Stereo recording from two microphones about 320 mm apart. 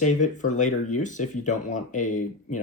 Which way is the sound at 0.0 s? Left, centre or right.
Left.